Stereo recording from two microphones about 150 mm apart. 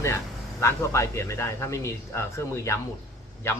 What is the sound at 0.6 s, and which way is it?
A man's voice, 20° left (ahead or behind).